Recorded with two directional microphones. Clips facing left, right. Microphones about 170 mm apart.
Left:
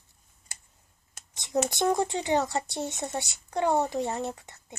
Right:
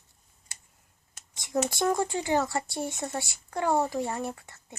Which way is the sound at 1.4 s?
20° left (ahead or behind).